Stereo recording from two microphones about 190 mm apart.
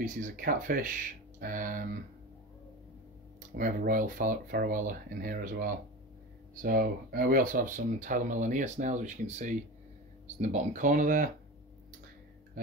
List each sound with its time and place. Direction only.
0.0 s speech: 45° right (ahead or behind)
3.5 s speech: 45° right (ahead or behind)